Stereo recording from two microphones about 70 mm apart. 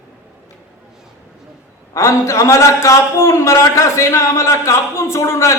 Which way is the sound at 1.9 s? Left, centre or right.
Left.